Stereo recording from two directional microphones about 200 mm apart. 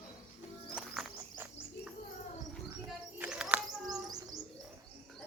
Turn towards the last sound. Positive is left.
turn(degrees=-5)  # may be behind; listen again after turning